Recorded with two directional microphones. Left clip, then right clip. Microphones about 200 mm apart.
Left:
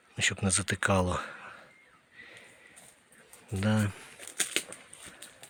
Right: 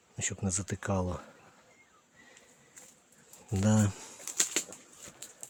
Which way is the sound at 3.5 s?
20° right (ahead or behind).